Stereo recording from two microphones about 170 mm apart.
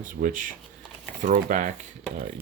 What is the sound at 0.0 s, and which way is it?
Speech, 50° right (ahead or behind).